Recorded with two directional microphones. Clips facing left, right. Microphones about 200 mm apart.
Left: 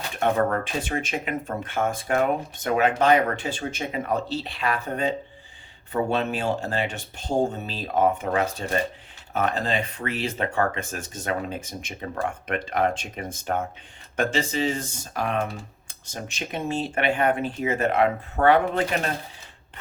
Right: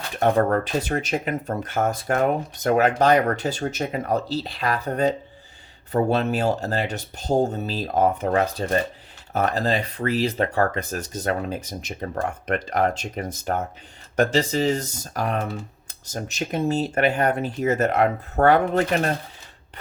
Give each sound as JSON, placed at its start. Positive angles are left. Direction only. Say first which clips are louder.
{"t": 0.2, "sound": "speech", "louder": "right 3 dB", "side_deg": -40}